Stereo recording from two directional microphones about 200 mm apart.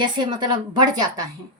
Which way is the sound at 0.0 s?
20° right (ahead or behind).